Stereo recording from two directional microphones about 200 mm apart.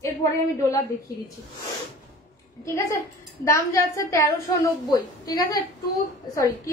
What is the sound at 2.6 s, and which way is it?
A woman's voice, 15° left (ahead or behind).